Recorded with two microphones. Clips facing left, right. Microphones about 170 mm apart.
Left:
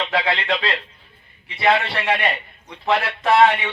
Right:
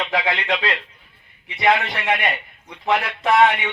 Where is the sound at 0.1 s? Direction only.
15° right (ahead or behind).